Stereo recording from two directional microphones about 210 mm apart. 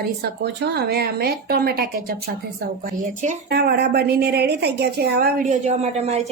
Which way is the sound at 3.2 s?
35° right (ahead or behind).